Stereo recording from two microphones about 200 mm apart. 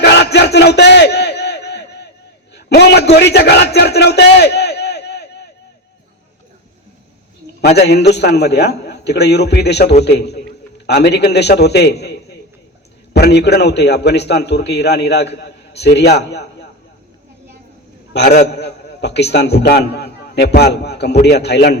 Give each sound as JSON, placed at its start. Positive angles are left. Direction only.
{"t": 0.0, "sound": "battle cry", "side_deg": 55}
{"t": 2.6, "sound": "a man's voice", "side_deg": 55}
{"t": 7.8, "sound": "a man's voice", "side_deg": 55}
{"t": 18.1, "sound": "a man's voice", "side_deg": 55}